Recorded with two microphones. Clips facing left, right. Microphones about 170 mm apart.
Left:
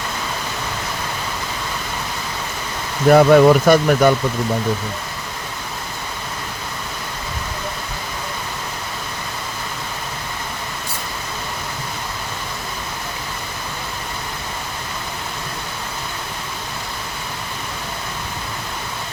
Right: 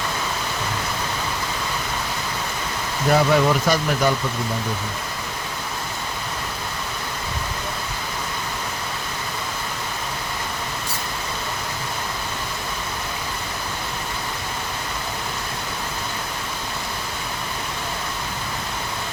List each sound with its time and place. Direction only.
3.1 s speech: 55° left (ahead or behind)